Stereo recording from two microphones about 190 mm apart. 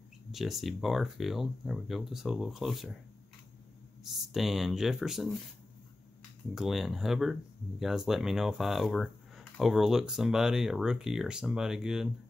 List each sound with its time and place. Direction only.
0.3 s speech: centre (ahead or behind)
4.3 s speech: centre (ahead or behind)
6.5 s speech: centre (ahead or behind)